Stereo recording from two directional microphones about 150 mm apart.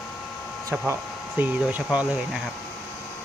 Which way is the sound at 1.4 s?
10° right (ahead or behind).